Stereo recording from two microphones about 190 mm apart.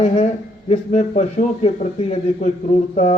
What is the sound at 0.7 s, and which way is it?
Speech, 35° left (ahead or behind).